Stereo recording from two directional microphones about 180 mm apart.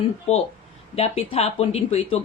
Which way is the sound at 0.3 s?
35° left (ahead or behind).